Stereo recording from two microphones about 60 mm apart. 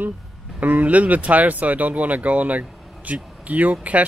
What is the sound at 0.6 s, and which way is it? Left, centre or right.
A man's voice, right.